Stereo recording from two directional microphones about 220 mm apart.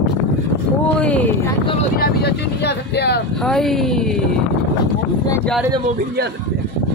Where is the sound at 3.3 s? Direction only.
Centre (ahead or behind).